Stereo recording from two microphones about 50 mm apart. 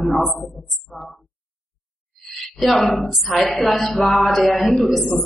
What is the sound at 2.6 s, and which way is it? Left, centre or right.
A woman's voice, centre.